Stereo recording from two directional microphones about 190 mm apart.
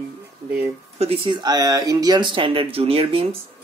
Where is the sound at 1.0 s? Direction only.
30° right (ahead or behind).